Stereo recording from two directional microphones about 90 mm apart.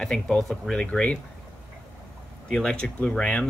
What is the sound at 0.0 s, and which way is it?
Speech, 5° left (ahead or behind).